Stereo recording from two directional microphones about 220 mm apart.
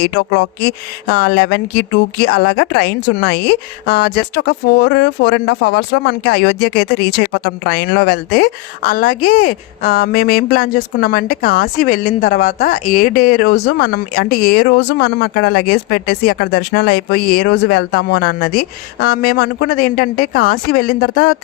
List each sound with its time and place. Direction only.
0.0 s speech: 55° left (ahead or behind)